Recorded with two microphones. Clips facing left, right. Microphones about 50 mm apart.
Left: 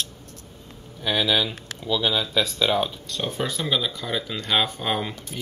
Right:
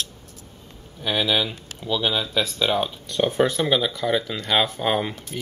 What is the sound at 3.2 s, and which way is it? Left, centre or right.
Speech, right.